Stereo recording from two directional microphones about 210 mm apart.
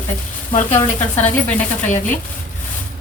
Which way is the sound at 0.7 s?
10° left (ahead or behind).